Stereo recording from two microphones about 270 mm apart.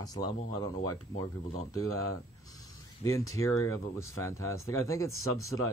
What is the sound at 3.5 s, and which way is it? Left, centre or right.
Speech, left.